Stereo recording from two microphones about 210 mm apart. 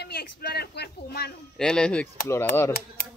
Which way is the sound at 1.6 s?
5° left (ahead or behind).